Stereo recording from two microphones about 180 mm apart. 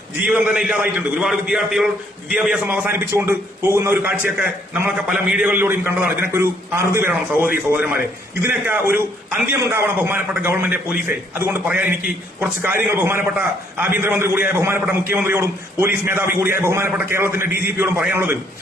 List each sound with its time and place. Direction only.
0.3 s a man's voice: 5° right (ahead or behind)
17.4 s a man's voice: 55° left (ahead or behind)
17.7 s a man's voice: 10° right (ahead or behind)